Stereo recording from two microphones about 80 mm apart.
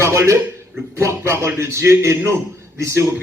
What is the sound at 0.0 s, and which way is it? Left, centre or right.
A man's voice, right.